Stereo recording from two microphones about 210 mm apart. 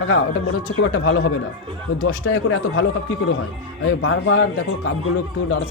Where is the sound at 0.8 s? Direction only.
75° left (ahead or behind).